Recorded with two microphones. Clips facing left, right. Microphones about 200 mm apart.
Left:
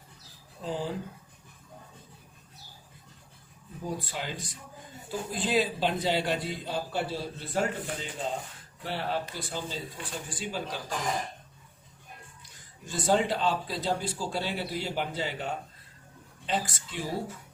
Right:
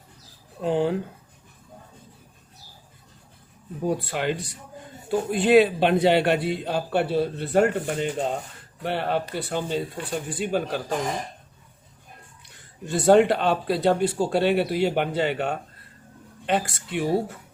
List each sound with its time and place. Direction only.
0.6 s a man's voice: 65° right (ahead or behind)
3.8 s a man's voice: 65° right (ahead or behind)
12.8 s a man's voice: 65° right (ahead or behind)